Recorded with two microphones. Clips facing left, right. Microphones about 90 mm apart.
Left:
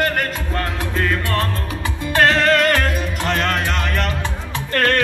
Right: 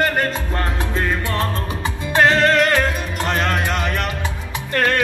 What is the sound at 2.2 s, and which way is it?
Music, 10° right (ahead or behind).